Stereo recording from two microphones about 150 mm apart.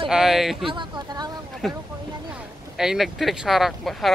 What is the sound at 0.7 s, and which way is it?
Speech, 30° right (ahead or behind).